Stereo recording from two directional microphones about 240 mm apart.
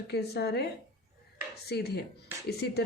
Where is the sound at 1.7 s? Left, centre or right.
Left.